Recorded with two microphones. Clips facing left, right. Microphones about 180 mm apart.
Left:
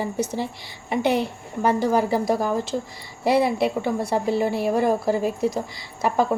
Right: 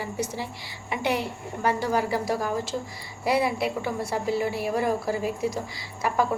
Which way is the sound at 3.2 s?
25° left (ahead or behind).